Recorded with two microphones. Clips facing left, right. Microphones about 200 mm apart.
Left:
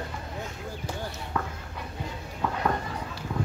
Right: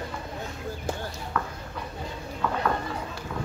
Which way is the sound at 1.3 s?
20° left (ahead or behind).